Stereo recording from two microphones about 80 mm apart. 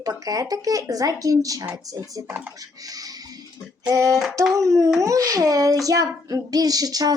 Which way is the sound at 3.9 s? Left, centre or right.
Right.